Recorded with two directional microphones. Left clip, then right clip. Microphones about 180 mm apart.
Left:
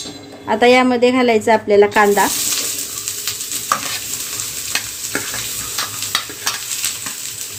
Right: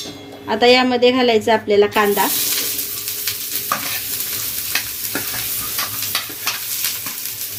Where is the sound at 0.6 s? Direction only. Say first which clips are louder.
Left 1 dB; 45° left (ahead or behind).